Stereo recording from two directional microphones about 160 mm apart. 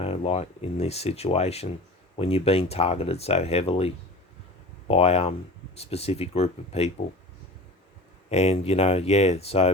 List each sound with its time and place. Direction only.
0.0 s speech: 40° left (ahead or behind)
8.3 s speech: 40° left (ahead or behind)